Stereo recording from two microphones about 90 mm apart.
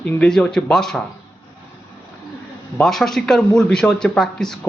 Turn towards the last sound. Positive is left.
turn(degrees=5)  # may be behind; listen again after turning